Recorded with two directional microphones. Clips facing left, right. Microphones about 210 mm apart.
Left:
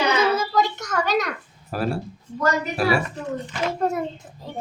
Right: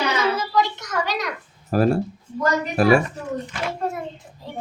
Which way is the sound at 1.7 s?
45° right (ahead or behind).